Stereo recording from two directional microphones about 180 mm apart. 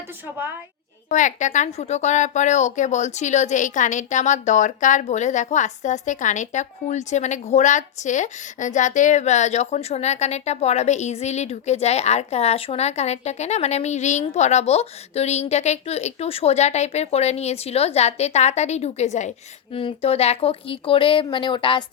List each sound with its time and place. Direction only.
1.1 s a woman's voice: 45° left (ahead or behind); by 21.8 s 25° left (ahead or behind)